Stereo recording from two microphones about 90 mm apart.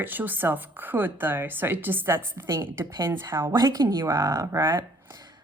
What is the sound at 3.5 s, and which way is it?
Speech, 50° right (ahead or behind).